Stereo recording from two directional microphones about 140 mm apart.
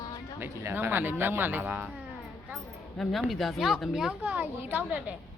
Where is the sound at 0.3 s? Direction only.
15° right (ahead or behind).